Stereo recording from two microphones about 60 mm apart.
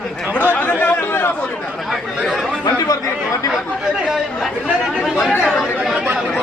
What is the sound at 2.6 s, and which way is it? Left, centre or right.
Speech, left.